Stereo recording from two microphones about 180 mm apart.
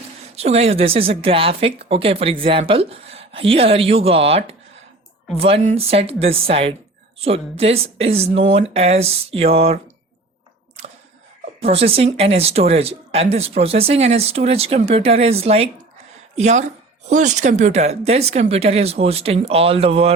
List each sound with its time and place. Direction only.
0.3 s a woman's voice: 35° right (ahead or behind)
11.6 s a woman's voice: 30° right (ahead or behind)